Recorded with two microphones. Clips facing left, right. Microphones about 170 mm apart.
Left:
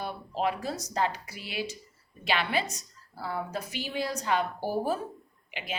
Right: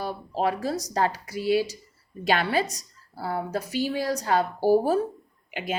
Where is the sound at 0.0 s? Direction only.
40° right (ahead or behind).